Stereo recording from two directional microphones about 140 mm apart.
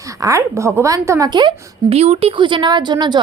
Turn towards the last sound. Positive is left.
turn(degrees=-30)  # may be behind; listen again after turning